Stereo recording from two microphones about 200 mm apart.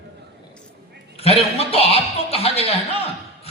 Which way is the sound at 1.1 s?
30° left (ahead or behind).